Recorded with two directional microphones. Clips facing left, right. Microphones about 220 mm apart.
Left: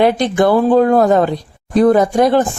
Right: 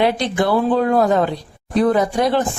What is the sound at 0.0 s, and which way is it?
Speech, 50° left (ahead or behind).